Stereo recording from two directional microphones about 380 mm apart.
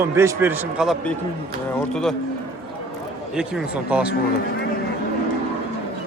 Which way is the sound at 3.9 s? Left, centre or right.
Centre.